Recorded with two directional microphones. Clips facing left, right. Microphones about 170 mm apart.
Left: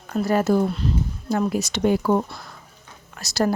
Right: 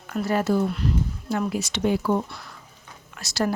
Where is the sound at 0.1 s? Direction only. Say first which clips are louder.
Left 3 dB; 40° left (ahead or behind).